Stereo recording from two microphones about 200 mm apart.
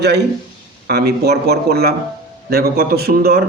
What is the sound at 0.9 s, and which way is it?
A man's voice, 55° right (ahead or behind).